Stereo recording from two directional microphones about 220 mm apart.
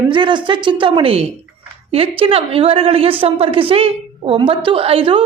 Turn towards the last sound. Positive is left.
turn(degrees=-25)  # may be behind; listen again after turning